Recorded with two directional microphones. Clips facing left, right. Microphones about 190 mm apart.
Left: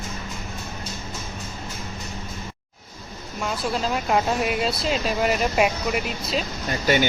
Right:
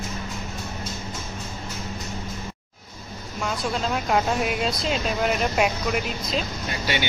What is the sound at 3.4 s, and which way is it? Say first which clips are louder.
Speech: left 1 dB; centre (ahead or behind).